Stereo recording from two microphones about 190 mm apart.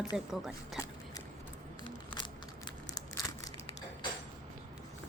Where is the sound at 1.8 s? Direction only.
25° left (ahead or behind).